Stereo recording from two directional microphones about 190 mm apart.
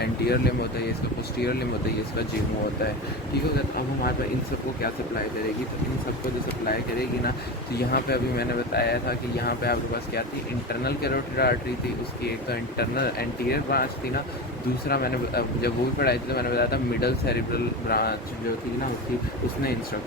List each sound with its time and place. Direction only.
0.0 s speech: 55° left (ahead or behind)
7.8 s speech: 55° left (ahead or behind)
10.8 s speech: 55° left (ahead or behind)
14.8 s speech: 55° left (ahead or behind)